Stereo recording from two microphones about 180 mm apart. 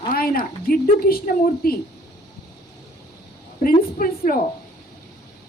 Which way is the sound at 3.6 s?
50° left (ahead or behind).